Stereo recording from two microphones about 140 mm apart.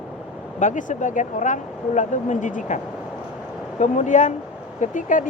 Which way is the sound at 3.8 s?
60° left (ahead or behind).